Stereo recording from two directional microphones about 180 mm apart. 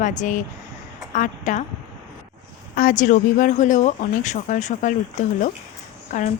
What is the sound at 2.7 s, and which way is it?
A woman's voice, 45° left (ahead or behind).